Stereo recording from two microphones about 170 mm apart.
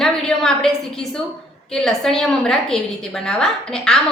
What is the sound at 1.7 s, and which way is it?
A woman's voice, 5° left (ahead or behind).